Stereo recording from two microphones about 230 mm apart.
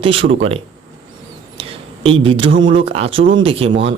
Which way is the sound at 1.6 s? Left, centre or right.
Right.